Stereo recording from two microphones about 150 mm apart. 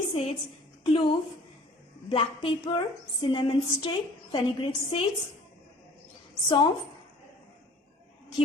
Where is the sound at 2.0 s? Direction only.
35° left (ahead or behind).